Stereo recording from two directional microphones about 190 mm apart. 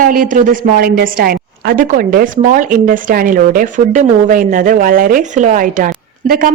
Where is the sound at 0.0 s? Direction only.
45° right (ahead or behind).